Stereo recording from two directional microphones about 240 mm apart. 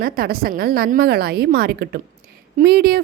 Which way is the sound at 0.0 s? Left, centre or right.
Right.